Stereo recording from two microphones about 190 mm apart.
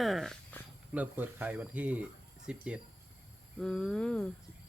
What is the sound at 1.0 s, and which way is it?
Speech, 10° right (ahead or behind).